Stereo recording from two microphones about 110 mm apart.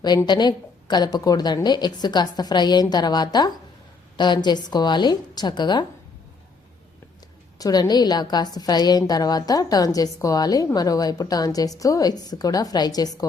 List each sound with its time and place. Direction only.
0.3 s a woman's voice: 40° left (ahead or behind)
7.6 s a woman's voice: 35° left (ahead or behind)